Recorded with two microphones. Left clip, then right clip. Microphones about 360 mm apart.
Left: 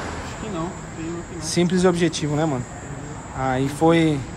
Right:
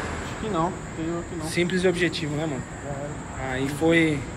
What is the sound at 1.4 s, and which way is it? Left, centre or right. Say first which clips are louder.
Speech: left 4 dB; centre.